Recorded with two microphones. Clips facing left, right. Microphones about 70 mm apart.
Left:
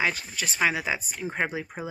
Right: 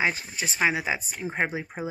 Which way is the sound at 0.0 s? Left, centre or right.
Right.